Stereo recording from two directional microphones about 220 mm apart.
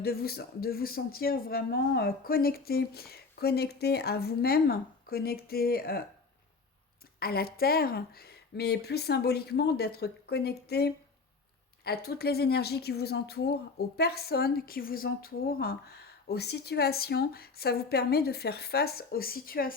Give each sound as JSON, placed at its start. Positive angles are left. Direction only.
{"t": 0.0, "sound": "speech", "side_deg": 45}
{"t": 7.2, "sound": "speech", "side_deg": 45}